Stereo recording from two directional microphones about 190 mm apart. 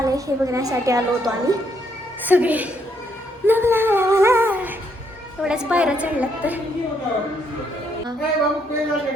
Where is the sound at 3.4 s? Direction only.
10° right (ahead or behind).